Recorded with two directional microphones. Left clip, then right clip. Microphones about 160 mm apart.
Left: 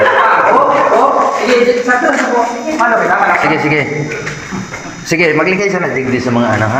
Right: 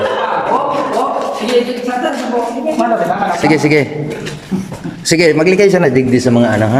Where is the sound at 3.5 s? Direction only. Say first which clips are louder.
Right 1 dB; 40° right (ahead or behind).